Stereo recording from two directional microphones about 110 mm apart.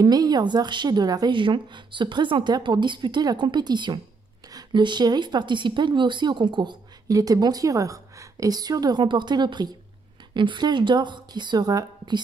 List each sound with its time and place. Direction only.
0.0 s a woman's voice: 35° right (ahead or behind)
7.1 s a woman's voice: 35° right (ahead or behind)